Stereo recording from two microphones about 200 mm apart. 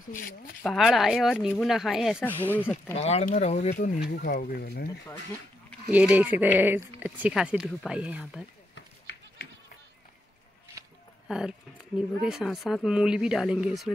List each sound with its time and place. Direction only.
0.6 s speech: centre (ahead or behind)
2.4 s speech: 10° left (ahead or behind)
3.0 s speech: 35° left (ahead or behind)
4.2 s speech: 45° left (ahead or behind)
5.9 s speech: 10° right (ahead or behind)
8.7 s run: 60° left (ahead or behind)
11.2 s speech: 5° right (ahead or behind)